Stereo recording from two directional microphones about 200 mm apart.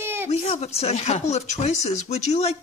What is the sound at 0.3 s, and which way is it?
Speech, 30° left (ahead or behind).